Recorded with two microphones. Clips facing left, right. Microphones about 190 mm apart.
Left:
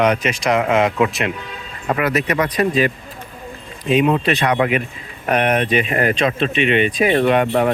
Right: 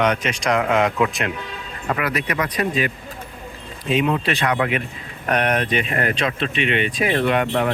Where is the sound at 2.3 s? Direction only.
35° left (ahead or behind).